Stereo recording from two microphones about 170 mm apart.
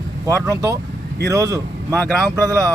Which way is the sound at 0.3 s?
20° right (ahead or behind).